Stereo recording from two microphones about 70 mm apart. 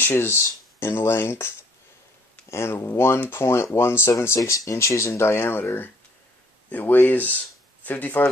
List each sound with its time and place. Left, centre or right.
0.0 s speech: left
2.5 s speech: left
4.4 s speech: left